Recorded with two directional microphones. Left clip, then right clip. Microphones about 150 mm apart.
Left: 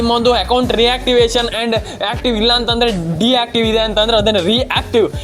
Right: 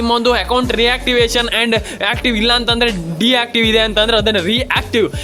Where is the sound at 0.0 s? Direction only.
15° right (ahead or behind).